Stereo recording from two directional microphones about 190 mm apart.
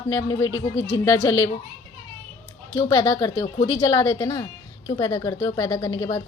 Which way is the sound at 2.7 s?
20° left (ahead or behind).